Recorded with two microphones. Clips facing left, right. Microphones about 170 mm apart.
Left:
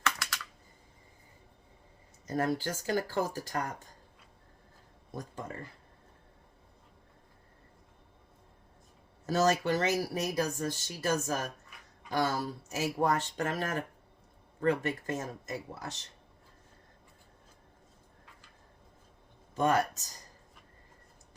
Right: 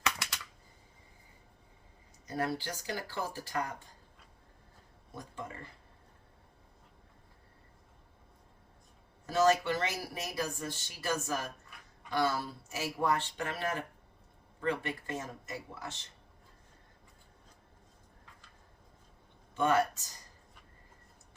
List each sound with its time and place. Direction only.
0.0 s typing: 20° right (ahead or behind)
2.2 s speech: 45° left (ahead or behind)
5.1 s speech: 40° left (ahead or behind)
9.2 s speech: 40° left (ahead or behind)
19.5 s speech: 40° left (ahead or behind)